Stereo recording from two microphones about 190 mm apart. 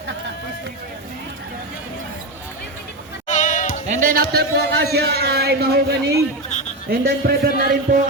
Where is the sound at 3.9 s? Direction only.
45° right (ahead or behind).